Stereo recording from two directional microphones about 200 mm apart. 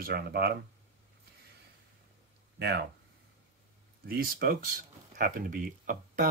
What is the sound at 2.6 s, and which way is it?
Speech, 55° right (ahead or behind).